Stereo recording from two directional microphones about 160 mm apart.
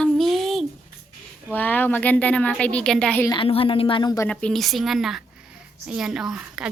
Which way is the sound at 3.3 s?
35° left (ahead or behind).